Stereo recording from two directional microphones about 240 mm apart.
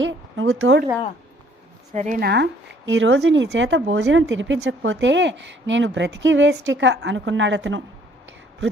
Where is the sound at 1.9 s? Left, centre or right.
Right.